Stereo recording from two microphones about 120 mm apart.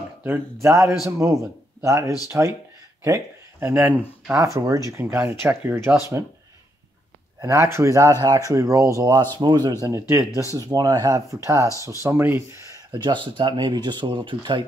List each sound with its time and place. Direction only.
0.2 s a man's voice: 20° right (ahead or behind)
4.9 s a man's voice: 20° right (ahead or behind)
7.4 s a man's voice: 25° right (ahead or behind)
9.8 s a man's voice: 25° right (ahead or behind)
13.0 s speech: 40° right (ahead or behind)